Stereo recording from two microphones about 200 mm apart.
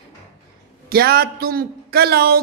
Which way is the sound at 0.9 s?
50° right (ahead or behind).